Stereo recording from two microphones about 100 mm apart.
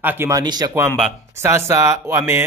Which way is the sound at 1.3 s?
25° right (ahead or behind).